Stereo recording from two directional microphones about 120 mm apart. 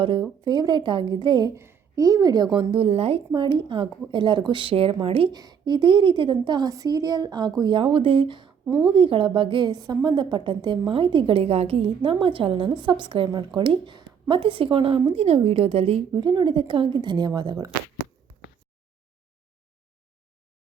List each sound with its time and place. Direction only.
0.0 s a woman's voice: 40° right (ahead or behind)
1.5 s a woman's voice: 20° right (ahead or behind); by 5.3 s 50° right (ahead or behind)
5.3 s a woman's voice: 35° right (ahead or behind)
8.6 s a woman's voice: 20° right (ahead or behind)
8.9 s a woman's voice: 45° right (ahead or behind)
16.1 s a woman's voice: 40° right (ahead or behind)